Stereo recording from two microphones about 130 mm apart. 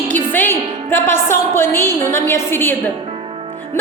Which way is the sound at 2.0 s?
20° left (ahead or behind).